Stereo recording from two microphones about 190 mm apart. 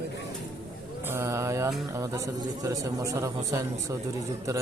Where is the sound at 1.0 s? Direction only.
15° right (ahead or behind).